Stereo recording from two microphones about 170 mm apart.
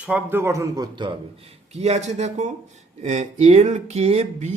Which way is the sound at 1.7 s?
40° right (ahead or behind).